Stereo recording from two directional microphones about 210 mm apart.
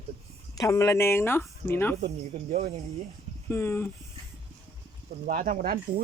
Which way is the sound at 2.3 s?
30° right (ahead or behind).